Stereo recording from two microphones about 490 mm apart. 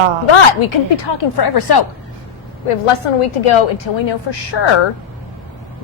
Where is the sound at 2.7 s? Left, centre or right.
Left.